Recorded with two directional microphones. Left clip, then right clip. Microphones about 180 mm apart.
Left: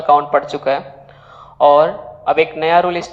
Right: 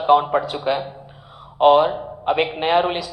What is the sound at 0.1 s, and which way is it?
Speech, 20° left (ahead or behind).